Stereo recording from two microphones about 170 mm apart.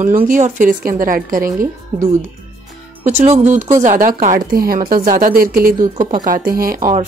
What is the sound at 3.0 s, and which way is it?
A woman's voice, 40° right (ahead or behind).